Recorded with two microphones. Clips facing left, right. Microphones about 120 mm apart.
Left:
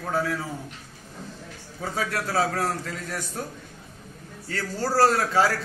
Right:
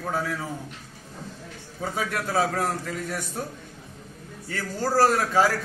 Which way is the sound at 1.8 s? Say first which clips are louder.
Even; 15° right (ahead or behind).